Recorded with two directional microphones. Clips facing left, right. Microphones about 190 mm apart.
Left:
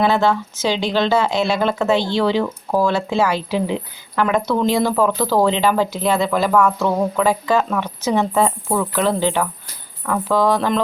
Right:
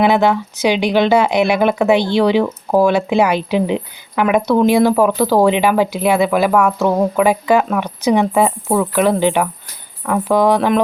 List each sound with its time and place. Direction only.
0.0 s speech: 15° right (ahead or behind)